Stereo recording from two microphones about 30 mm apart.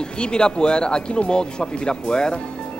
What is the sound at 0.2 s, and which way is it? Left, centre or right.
Speech, left.